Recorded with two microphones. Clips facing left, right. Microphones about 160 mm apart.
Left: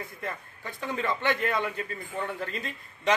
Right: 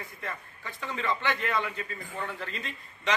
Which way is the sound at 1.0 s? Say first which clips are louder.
Left 2 dB; 50° left (ahead or behind).